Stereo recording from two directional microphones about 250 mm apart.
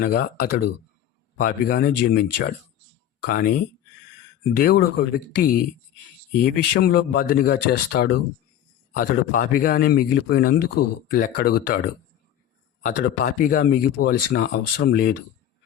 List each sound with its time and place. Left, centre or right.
0.0 s speech: left
1.4 s speech: left